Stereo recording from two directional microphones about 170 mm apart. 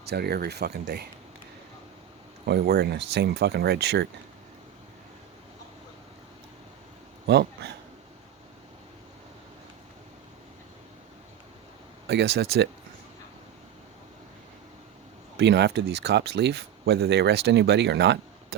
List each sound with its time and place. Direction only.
0.1 s speech: 70° right (ahead or behind)
2.5 s speech: 70° right (ahead or behind)
7.3 s speech: 80° right
12.0 s speech: 80° right
15.4 s speech: 85° right